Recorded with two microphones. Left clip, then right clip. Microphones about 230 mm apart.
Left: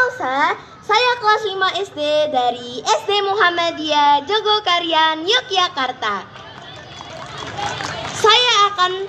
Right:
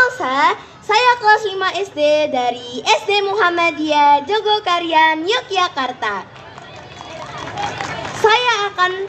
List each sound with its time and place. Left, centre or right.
0.0 s a child's voice: right
8.1 s a child's voice: right